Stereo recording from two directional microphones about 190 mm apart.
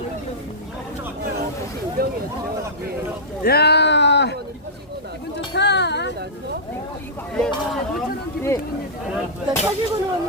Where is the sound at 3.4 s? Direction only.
60° left (ahead or behind).